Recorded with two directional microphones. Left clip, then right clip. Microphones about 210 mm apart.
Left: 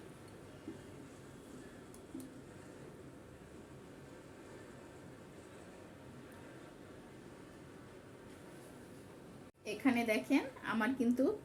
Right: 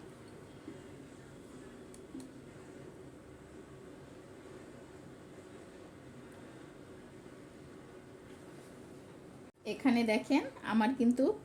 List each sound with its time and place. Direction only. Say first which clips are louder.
9.6 s a woman's voice: right 3 dB; 35° right (ahead or behind)